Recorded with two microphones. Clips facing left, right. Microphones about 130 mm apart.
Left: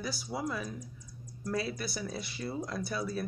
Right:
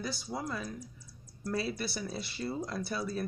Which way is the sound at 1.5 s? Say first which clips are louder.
Even; centre (ahead or behind).